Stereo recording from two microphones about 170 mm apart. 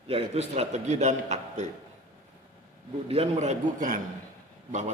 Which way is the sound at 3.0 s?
40° right (ahead or behind).